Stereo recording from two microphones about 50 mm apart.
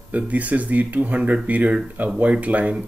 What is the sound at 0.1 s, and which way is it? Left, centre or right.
Speech, right.